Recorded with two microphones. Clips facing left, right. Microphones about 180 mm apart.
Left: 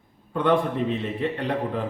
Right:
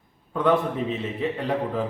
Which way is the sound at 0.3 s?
Centre (ahead or behind).